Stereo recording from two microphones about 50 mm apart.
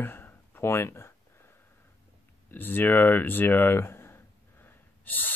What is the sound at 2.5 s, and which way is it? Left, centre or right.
Speech, left.